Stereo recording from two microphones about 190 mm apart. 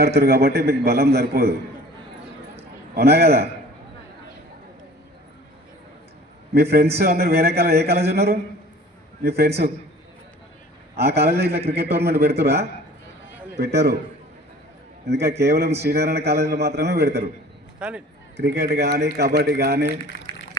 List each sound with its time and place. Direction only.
0.2 s speech: 55° right (ahead or behind)
2.9 s speech: 55° right (ahead or behind)
6.5 s speech: 60° right (ahead or behind)
11.2 s speech: 60° right (ahead or behind)
15.0 s speech: 60° right (ahead or behind)
17.7 s speech: 5° right (ahead or behind)
18.3 s speech: 60° right (ahead or behind)